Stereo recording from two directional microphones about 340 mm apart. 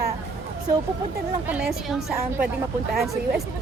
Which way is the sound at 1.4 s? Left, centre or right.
Centre.